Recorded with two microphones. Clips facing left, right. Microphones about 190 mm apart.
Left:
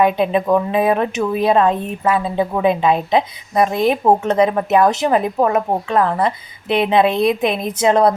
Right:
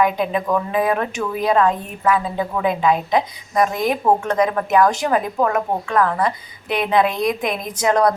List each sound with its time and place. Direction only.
0.0 s a woman's voice: 25° left (ahead or behind)